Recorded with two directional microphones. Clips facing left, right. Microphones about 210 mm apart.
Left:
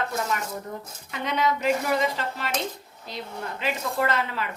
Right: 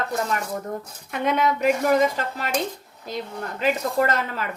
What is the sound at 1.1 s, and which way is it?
Speech, 50° right (ahead or behind).